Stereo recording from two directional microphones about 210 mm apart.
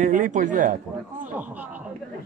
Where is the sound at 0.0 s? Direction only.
35° right (ahead or behind).